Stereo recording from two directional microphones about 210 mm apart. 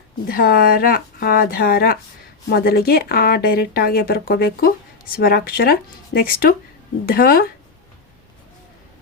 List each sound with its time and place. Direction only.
0.3 s a woman's voice: 45° left (ahead or behind)